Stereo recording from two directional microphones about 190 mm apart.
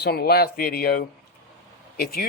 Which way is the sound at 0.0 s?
55° left (ahead or behind).